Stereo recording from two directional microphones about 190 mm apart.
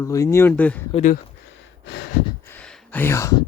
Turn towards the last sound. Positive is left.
turn(degrees=15)  # may be behind; listen again after turning